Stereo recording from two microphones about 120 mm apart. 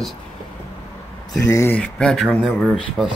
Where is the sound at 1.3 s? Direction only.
25° left (ahead or behind).